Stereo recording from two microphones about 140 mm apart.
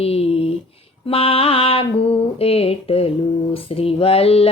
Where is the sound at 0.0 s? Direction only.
45° left (ahead or behind).